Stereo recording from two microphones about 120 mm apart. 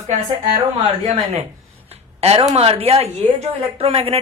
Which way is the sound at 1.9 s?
60° right (ahead or behind).